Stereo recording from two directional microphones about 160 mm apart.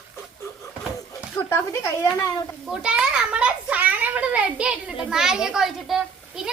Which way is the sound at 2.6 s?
5° right (ahead or behind).